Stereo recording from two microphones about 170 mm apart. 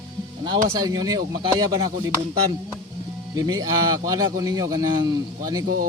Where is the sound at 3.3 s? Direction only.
20° right (ahead or behind).